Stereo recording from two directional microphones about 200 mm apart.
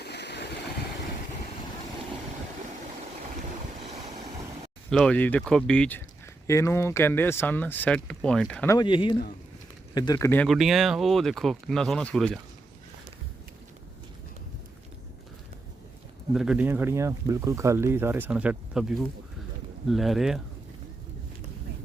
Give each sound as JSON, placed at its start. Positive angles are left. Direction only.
{"t": 0.0, "sound": "vehicle", "side_deg": 55}
{"t": 4.9, "sound": "speech", "side_deg": 5}
{"t": 8.7, "sound": "speech", "side_deg": 25}
{"t": 16.3, "sound": "speech", "side_deg": -5}